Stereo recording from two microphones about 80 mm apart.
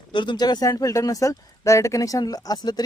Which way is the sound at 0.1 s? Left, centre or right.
Left.